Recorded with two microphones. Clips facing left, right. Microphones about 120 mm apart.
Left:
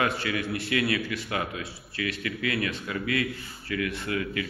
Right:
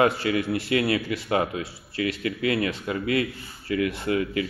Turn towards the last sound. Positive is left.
turn(degrees=-30)  # may be behind; listen again after turning